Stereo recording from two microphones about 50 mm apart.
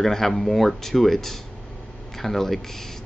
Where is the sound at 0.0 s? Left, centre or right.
Centre.